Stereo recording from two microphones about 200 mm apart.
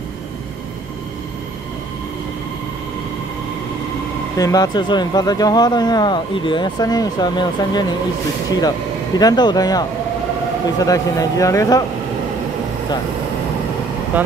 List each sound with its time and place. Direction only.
4.4 s speech: 20° left (ahead or behind)
9.2 s speech: 20° left (ahead or behind)
14.1 s speech: 10° right (ahead or behind)